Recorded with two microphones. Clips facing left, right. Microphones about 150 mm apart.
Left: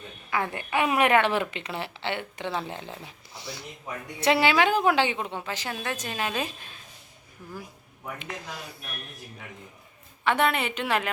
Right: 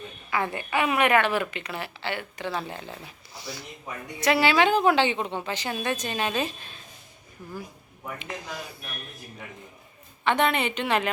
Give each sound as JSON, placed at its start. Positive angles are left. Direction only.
{"t": 0.3, "sound": "a woman's voice", "side_deg": -5}
{"t": 1.2, "sound": "speech", "side_deg": 25}
{"t": 4.5, "sound": "a woman's voice", "side_deg": 10}
{"t": 8.2, "sound": "a woman's voice", "side_deg": 0}
{"t": 10.2, "sound": "a woman's voice", "side_deg": 5}